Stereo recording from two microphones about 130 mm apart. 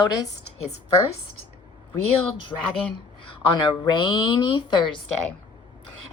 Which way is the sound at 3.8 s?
35° left (ahead or behind).